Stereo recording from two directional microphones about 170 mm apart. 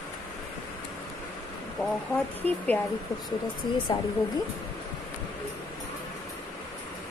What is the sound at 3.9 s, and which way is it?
Speech, 25° left (ahead or behind).